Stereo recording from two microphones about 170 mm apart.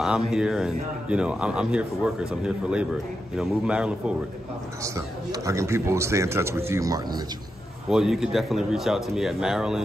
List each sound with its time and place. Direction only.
0.0 s speech: 5° right (ahead or behind)
4.8 s a man's voice: 20° right (ahead or behind)
7.9 s speech: 5° right (ahead or behind)